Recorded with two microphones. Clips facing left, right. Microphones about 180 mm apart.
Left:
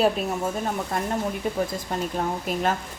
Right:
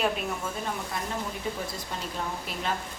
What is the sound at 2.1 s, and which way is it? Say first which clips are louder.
Speech: left 8 dB; 45° left (ahead or behind).